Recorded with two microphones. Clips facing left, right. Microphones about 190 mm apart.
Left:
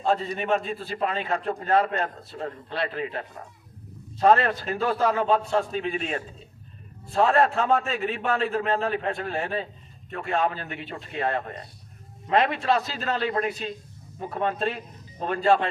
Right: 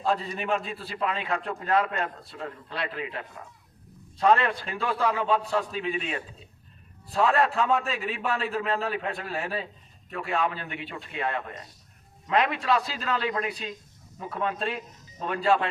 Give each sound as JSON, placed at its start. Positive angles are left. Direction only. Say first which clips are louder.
{"t": 0.1, "sound": "a man's voice", "louder": "left 3 dB", "side_deg": 35}